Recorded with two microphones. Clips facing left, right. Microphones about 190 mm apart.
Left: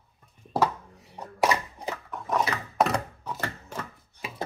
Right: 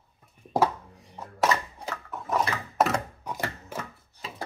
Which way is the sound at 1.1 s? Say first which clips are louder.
Left 1 dB; 15° left (ahead or behind).